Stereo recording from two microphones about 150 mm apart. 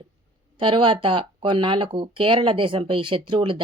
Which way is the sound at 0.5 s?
35° right (ahead or behind).